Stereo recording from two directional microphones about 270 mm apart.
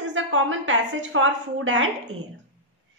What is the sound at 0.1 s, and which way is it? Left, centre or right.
A woman's voice, right.